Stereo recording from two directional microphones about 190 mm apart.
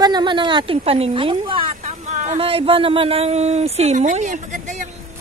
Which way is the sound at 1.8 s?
40° right (ahead or behind).